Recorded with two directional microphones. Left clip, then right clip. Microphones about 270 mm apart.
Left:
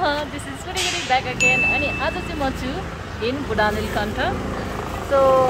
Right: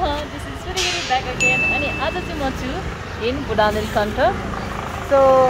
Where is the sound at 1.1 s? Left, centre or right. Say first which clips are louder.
Left 1 dB; centre.